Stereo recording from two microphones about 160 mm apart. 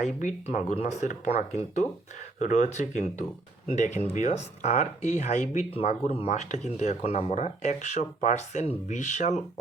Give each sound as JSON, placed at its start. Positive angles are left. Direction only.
{"t": 0.2, "sound": "speech", "side_deg": 50}